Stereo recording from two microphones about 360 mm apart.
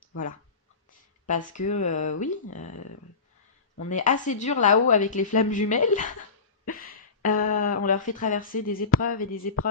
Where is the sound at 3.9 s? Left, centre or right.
Left.